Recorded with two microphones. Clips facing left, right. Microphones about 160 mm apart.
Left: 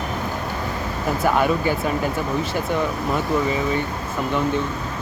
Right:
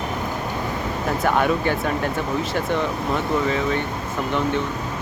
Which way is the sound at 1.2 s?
5° left (ahead or behind).